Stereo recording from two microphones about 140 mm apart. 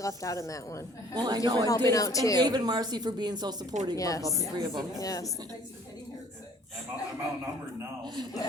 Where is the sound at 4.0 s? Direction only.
25° left (ahead or behind).